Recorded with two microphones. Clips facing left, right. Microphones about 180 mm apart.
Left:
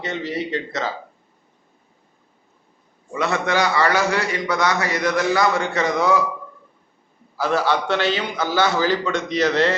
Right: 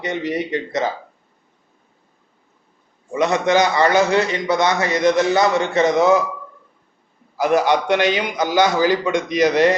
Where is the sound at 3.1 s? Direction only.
20° right (ahead or behind).